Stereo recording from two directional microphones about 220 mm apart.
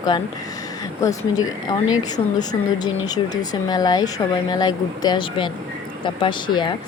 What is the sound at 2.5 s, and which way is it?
Speech, 20° left (ahead or behind).